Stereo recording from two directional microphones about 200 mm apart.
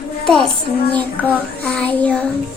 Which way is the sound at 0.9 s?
10° left (ahead or behind).